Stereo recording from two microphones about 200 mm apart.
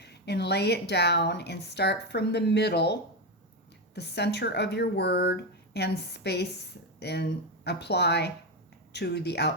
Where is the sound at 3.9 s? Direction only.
55° left (ahead or behind).